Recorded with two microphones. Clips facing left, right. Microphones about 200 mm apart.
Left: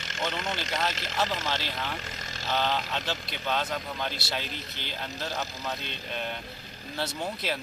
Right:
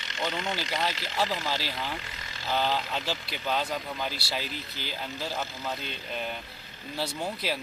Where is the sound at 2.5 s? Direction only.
5° right (ahead or behind).